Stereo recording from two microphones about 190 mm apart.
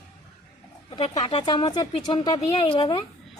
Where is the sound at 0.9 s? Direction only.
25° left (ahead or behind).